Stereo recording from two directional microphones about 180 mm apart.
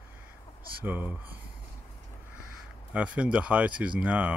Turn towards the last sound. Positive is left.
turn(degrees=-10)  # may be behind; listen again after turning